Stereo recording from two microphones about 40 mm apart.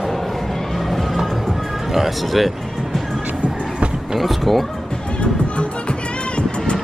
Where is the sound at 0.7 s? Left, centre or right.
Centre.